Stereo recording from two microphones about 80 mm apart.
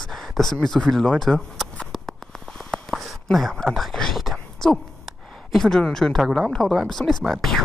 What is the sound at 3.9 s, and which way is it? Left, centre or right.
Speech, centre.